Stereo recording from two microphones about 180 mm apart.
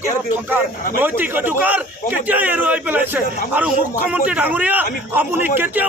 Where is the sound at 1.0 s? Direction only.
10° right (ahead or behind).